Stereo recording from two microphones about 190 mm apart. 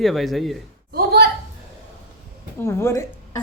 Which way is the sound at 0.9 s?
55° right (ahead or behind).